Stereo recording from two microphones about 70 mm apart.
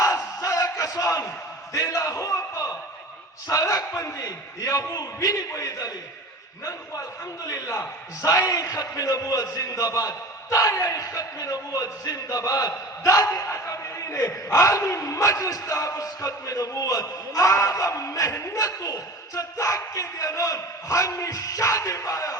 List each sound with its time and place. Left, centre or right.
0.0 s battle cry: left
1.7 s a man's voice: left
7.4 s a man's voice: left